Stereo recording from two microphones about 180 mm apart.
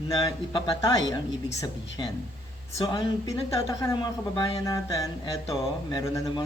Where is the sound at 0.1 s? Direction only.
20° left (ahead or behind).